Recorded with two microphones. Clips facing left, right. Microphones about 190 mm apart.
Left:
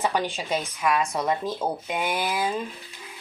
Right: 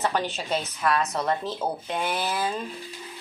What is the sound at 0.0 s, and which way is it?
A woman's voice, 10° left (ahead or behind).